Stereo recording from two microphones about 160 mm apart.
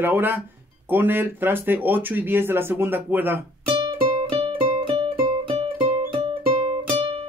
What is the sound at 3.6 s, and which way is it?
Music, 35° right (ahead or behind).